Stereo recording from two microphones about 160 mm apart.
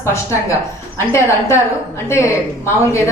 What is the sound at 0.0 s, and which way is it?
A woman's voice, 20° left (ahead or behind).